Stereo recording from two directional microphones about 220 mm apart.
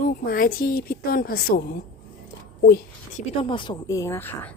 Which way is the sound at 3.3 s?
25° left (ahead or behind).